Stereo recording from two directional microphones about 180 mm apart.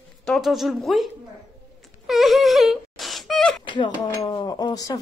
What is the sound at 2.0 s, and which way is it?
Wail, centre (ahead or behind).